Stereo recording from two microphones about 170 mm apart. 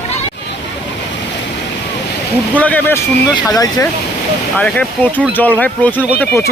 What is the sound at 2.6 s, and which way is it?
Speech, 10° left (ahead or behind).